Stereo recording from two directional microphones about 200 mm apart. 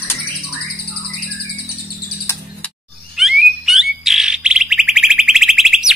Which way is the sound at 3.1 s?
Centre (ahead or behind).